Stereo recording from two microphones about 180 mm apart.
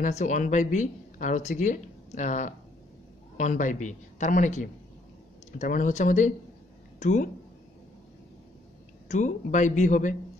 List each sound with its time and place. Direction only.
0.0 s speech: 45° left (ahead or behind)
9.1 s speech: 45° left (ahead or behind)